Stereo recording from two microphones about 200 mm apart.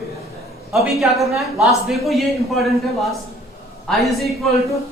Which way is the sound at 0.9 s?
Centre (ahead or behind).